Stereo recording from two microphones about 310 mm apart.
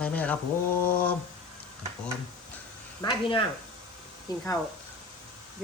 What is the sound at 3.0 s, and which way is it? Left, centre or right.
Speech, centre.